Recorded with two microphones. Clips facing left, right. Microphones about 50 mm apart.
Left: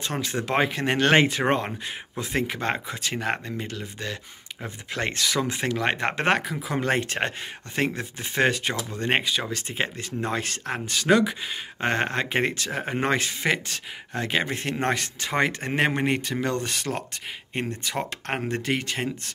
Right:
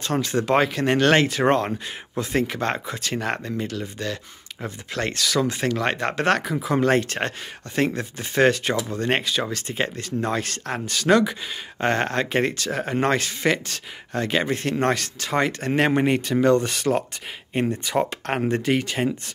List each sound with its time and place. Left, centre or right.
0.0 s speech: centre
6.6 s speech: centre
15.9 s speech: centre